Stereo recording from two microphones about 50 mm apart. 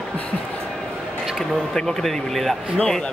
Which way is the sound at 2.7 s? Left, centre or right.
Centre.